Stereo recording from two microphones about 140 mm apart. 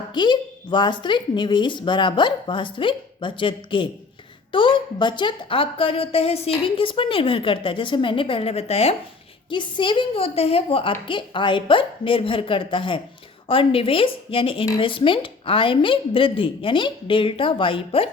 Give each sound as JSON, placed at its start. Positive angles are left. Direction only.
{"t": 0.1, "sound": "a woman's voice", "side_deg": 35}
{"t": 9.5, "sound": "a woman's voice", "side_deg": 35}